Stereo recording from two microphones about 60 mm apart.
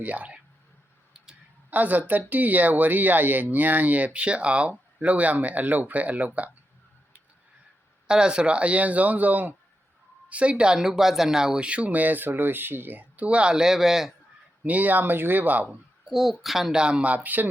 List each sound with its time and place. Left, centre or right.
0.0 s speech: right
1.7 s speech: right
8.0 s speech: centre
14.6 s speech: right
16.0 s speech: centre; by 17.5 s right